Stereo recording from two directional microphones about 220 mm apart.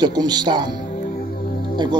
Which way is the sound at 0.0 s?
20° right (ahead or behind).